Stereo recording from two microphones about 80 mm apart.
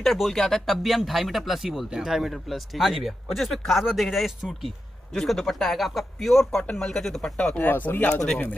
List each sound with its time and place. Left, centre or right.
0.0 s speech: centre
7.6 s speech: left